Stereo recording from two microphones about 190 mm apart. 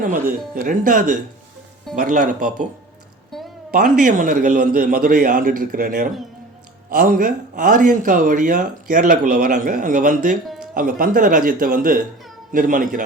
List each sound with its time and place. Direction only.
0.0 s speech: 45° right (ahead or behind)
3.3 s a sound: centre (ahead or behind)
3.7 s speech: 45° right (ahead or behind)